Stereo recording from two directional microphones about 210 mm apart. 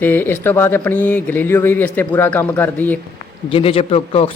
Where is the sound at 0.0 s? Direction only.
10° left (ahead or behind).